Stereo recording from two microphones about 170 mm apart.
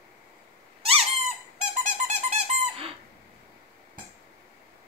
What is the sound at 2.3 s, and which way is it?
Squeak, 35° right (ahead or behind).